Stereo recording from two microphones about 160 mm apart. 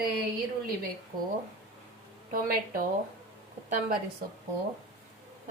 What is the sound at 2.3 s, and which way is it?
Speech, 60° right (ahead or behind).